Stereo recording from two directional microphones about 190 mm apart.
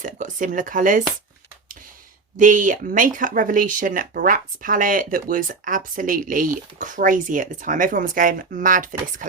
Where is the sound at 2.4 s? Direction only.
45° right (ahead or behind).